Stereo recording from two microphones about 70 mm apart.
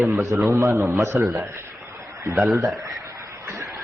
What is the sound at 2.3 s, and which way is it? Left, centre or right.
Speech, right.